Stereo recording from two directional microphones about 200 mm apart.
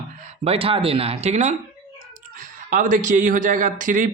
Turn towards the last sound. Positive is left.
turn(degrees=-40)  # may be behind; listen again after turning